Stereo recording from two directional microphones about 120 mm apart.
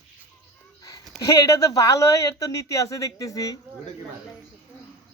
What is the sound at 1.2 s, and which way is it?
Speech, 30° left (ahead or behind).